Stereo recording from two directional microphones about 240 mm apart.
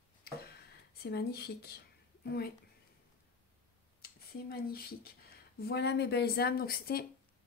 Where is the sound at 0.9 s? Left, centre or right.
Left.